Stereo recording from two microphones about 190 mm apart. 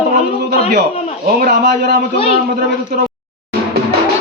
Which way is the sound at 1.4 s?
60° right (ahead or behind).